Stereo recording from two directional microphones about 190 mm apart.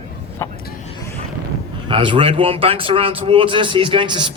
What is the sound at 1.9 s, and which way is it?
A man's voice, 25° right (ahead or behind).